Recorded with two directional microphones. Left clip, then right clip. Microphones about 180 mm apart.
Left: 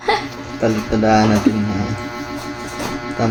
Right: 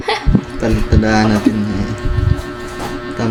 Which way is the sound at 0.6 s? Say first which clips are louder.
Left 2 dB; 45° right (ahead or behind).